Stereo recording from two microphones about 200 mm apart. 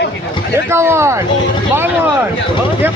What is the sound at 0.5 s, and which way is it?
Speech, 10° right (ahead or behind).